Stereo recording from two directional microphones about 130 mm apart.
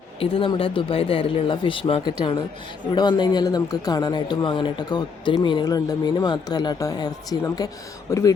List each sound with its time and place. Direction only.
0.2 s speech: 45° left (ahead or behind); by 8.2 s 20° left (ahead or behind)